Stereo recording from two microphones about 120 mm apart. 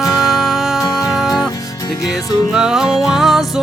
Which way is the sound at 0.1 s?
Centre (ahead or behind).